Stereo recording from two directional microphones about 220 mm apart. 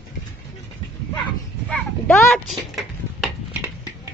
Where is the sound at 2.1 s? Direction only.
Centre (ahead or behind).